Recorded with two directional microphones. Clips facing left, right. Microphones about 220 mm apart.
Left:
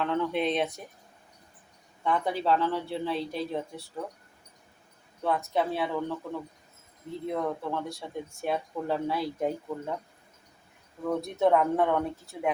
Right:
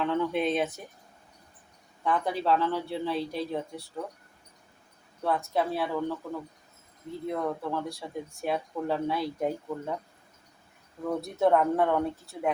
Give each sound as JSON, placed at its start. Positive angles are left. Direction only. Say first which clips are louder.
{"t": 0.0, "sound": "speech", "louder": "right 1 dB", "side_deg": 0}
{"t": 2.0, "sound": "speech", "louder": "even", "side_deg": 0}
{"t": 5.2, "sound": "speech", "louder": "even", "side_deg": 0}
{"t": 11.0, "sound": "speech", "louder": "even", "side_deg": 0}